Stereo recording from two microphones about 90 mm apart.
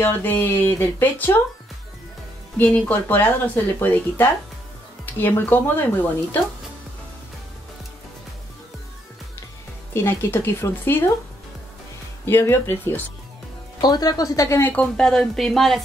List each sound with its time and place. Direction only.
0.0 s speech: 20° left (ahead or behind)
2.5 s speech: 20° left (ahead or behind)
9.9 s speech: 25° left (ahead or behind)
12.3 s speech: 25° left (ahead or behind)
13.7 s a woman's voice: 50° left (ahead or behind)
14.6 s speech: 15° left (ahead or behind)
15.0 s speech: 5° left (ahead or behind)